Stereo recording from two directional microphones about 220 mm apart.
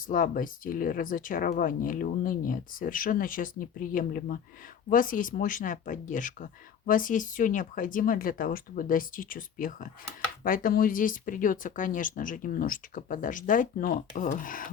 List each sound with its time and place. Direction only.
0.1 s speech: 40° left (ahead or behind)